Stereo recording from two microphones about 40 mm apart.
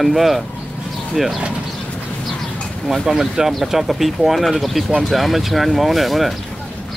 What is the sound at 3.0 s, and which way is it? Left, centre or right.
Speech, centre.